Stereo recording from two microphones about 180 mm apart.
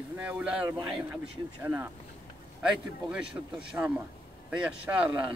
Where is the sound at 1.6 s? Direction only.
15° right (ahead or behind).